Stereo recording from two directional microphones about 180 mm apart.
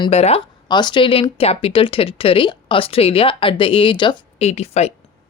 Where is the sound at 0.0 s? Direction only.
35° left (ahead or behind).